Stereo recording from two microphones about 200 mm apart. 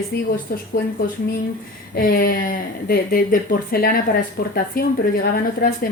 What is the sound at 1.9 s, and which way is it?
A woman's voice, 45° left (ahead or behind).